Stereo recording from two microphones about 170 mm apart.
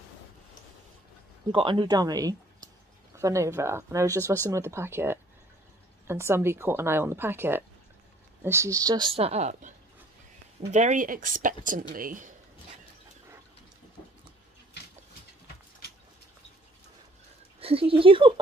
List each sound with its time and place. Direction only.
1.5 s a woman's voice: 30° right (ahead or behind); by 12.4 s 50° right (ahead or behind)
17.6 s speech: 35° right (ahead or behind)